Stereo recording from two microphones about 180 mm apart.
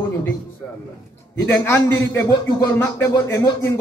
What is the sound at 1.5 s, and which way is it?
Speech, 10° left (ahead or behind).